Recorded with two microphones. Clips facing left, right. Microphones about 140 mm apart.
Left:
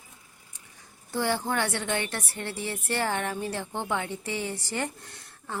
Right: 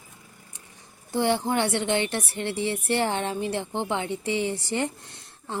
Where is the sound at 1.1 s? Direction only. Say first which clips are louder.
Right 4 dB; 20° right (ahead or behind).